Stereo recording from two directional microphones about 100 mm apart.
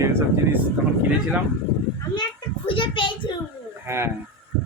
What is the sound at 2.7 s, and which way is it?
Speech, 55° left (ahead or behind).